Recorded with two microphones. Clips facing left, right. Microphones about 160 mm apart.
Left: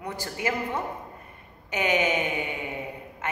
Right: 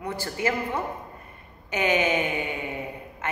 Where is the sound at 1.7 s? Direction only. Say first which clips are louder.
Right 1 dB; 20° left (ahead or behind).